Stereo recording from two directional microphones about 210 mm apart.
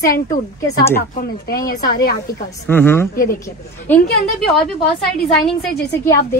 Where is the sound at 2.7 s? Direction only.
10° left (ahead or behind).